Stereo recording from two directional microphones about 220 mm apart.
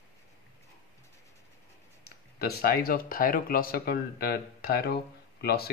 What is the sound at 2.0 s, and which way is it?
Speech, 45° left (ahead or behind).